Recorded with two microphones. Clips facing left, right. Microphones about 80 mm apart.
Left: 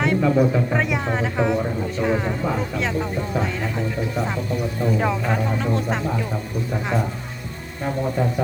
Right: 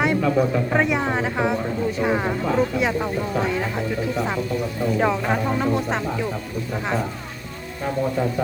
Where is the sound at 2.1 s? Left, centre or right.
Right.